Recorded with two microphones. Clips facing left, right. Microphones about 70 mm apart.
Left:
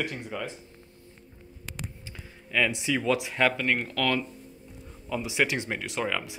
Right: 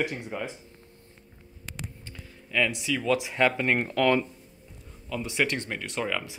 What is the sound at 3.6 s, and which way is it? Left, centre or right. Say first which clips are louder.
Speech: right 3 dB; right.